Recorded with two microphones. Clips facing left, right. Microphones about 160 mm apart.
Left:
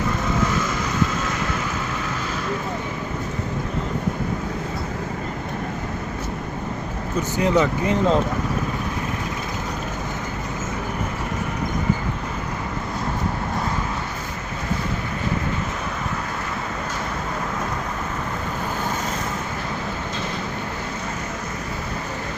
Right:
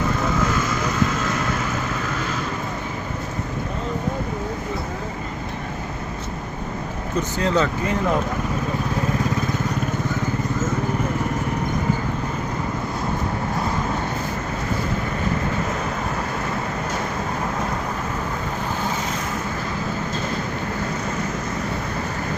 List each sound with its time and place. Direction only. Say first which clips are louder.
7.3 s speech: left 3 dB; 15° left (ahead or behind)